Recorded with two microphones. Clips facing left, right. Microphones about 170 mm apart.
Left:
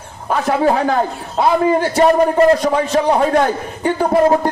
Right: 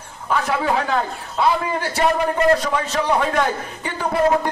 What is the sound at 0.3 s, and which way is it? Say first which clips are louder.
A man's voice: left 5 dB; 40° left (ahead or behind).